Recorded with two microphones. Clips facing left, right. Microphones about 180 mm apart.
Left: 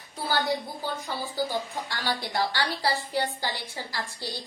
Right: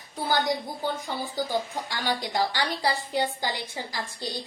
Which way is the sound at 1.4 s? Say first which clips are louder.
Right 2 dB; 15° right (ahead or behind).